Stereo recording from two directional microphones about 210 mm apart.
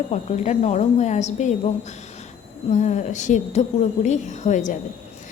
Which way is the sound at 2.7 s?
35° left (ahead or behind).